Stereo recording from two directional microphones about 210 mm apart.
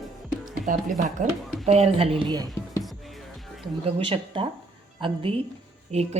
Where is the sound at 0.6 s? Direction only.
40° right (ahead or behind); by 2.5 s 20° right (ahead or behind).